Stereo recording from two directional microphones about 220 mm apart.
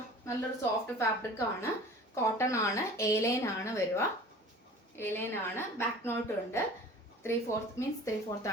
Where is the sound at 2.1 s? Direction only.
15° left (ahead or behind).